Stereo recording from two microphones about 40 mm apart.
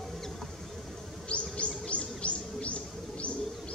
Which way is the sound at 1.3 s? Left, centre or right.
Left.